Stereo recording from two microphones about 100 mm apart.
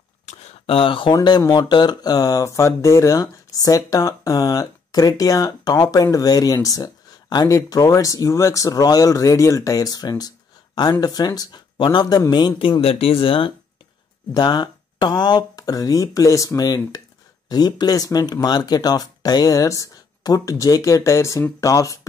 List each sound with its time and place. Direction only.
0.4 s a sound: 80° left; by 1.1 s 60° left (ahead or behind)
1.1 s speech: 45° left (ahead or behind)
12.8 s speech: 70° left (ahead or behind)
14.3 s speech: 45° left (ahead or behind)